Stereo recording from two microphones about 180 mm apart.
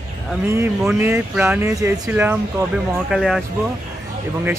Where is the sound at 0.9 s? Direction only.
15° right (ahead or behind).